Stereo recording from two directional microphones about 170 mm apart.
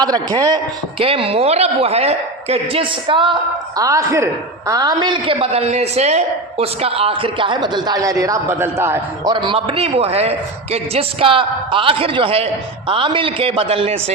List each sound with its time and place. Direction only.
0.0 s speech: 25° right (ahead or behind)
3.8 s a man's voice: 20° right (ahead or behind)
9.3 s speech: 30° right (ahead or behind)